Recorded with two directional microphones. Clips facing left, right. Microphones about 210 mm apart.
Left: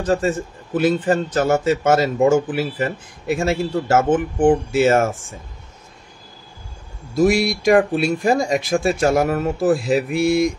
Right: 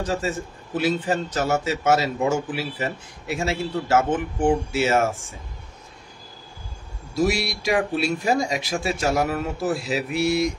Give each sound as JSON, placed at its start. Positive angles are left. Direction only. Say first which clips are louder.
{"t": 0.0, "sound": "speech", "louder": "left 6 dB", "side_deg": 50}
{"t": 7.2, "sound": "speech", "louder": "left 10 dB", "side_deg": 50}